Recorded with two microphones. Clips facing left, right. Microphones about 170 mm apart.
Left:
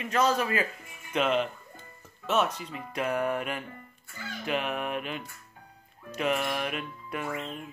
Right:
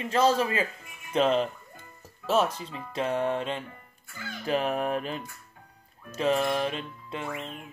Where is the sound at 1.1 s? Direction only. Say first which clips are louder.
Right 3 dB; 35° right (ahead or behind).